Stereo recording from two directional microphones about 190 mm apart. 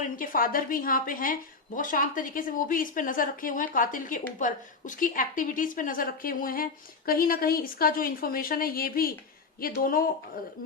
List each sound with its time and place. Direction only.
0.0 s a woman's voice: 45° left (ahead or behind)